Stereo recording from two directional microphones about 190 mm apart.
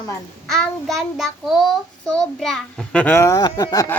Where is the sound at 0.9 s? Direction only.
Centre (ahead or behind).